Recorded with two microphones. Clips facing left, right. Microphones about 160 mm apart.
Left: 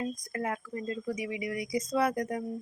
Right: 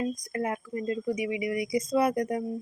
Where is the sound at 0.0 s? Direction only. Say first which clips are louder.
Right 4 dB; 20° right (ahead or behind).